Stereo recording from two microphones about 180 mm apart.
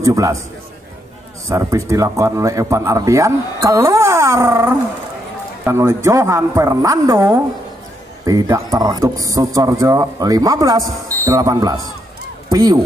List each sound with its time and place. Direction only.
0.0 s a man's voice: 15° right (ahead or behind)
1.5 s a man's voice: 15° right (ahead or behind)
12.4 s a sound: 20° right (ahead or behind)